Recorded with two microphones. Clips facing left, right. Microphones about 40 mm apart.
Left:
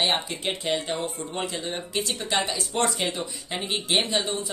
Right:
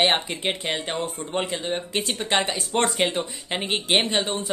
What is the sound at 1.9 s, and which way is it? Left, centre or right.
Speech, right.